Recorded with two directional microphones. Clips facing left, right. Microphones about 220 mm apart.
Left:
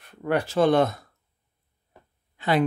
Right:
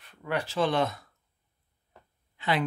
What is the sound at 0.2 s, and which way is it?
Speech, 50° left (ahead or behind).